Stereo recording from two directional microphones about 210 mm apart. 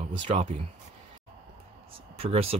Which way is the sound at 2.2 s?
30° right (ahead or behind).